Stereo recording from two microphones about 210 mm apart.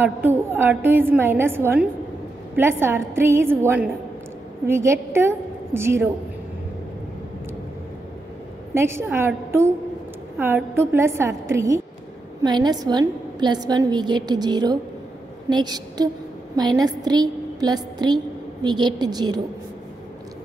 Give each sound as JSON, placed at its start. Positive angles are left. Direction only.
{"t": 0.0, "sound": "a woman's voice", "side_deg": -10}
{"t": 8.7, "sound": "a woman's voice", "side_deg": -10}